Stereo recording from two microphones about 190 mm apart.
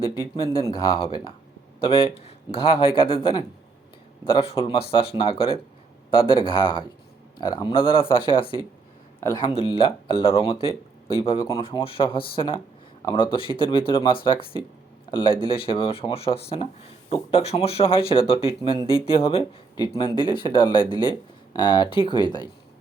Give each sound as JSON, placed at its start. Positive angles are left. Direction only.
{"t": 0.5, "sound": "speech", "side_deg": 15}
{"t": 0.9, "sound": "speech", "side_deg": 30}
{"t": 13.3, "sound": "speech", "side_deg": 25}